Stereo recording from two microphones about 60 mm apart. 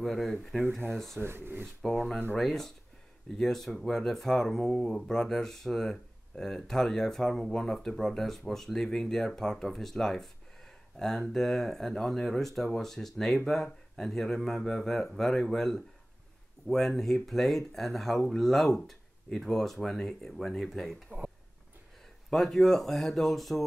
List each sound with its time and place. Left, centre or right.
0.0 s speech: centre
1.1 s speech: right
1.8 s speech: centre
22.3 s speech: centre